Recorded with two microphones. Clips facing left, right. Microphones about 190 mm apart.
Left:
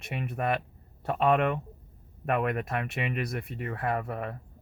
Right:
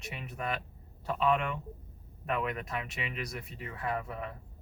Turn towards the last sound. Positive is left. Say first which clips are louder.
# left 5 dB
turn(degrees=55)  # may be behind; listen again after turning